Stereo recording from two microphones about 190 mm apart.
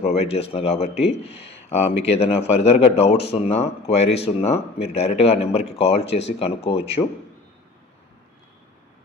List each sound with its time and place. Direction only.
0.0 s speech: 30° left (ahead or behind)